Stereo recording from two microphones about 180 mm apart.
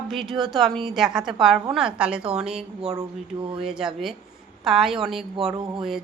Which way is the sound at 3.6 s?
5° right (ahead or behind).